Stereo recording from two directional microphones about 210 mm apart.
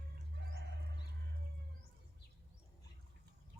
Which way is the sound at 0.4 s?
55° right (ahead or behind).